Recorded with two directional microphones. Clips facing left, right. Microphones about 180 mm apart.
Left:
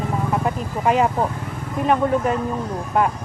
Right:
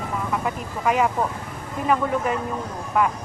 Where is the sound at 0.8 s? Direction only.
30° left (ahead or behind).